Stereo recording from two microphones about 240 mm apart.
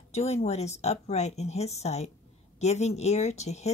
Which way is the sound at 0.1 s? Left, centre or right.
Left.